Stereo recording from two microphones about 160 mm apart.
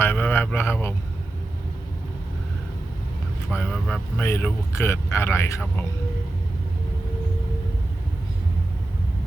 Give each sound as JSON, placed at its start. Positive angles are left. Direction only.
{"t": 0.0, "sound": "speech", "side_deg": 10}
{"t": 3.5, "sound": "speech", "side_deg": 5}
{"t": 4.3, "sound": "speech", "side_deg": 15}